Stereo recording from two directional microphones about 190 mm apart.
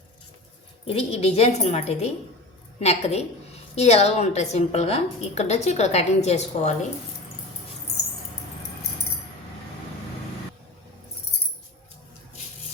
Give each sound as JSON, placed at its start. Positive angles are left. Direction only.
{"t": 0.9, "sound": "a woman's voice", "side_deg": 30}